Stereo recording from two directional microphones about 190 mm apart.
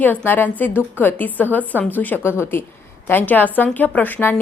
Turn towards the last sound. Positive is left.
turn(degrees=10)  # may be behind; listen again after turning